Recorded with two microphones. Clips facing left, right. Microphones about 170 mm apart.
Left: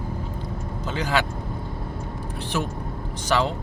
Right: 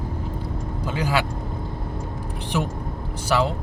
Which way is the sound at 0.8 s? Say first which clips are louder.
Right 1 dB; 10° right (ahead or behind).